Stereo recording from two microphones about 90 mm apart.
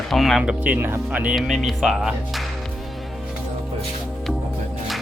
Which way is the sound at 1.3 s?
5° right (ahead or behind).